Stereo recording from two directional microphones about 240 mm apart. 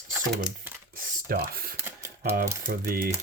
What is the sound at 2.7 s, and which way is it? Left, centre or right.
Speech, right.